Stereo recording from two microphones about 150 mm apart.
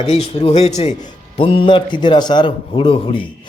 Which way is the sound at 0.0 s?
45° left (ahead or behind).